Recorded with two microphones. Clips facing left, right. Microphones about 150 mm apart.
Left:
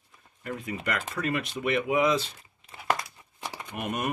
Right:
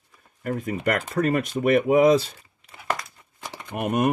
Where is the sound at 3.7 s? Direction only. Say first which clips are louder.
Right 9 dB; 50° right (ahead or behind).